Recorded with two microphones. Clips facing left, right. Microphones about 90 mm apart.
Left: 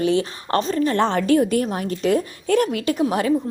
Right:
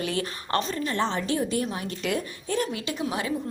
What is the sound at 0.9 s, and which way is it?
A woman's voice, 60° left (ahead or behind).